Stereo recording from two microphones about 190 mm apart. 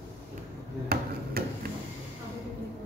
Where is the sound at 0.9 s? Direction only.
55° right (ahead or behind).